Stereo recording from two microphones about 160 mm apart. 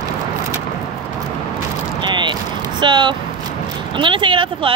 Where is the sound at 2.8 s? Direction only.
30° right (ahead or behind).